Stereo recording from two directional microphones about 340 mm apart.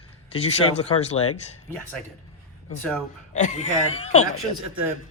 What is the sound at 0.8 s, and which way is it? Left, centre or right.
Speech, centre.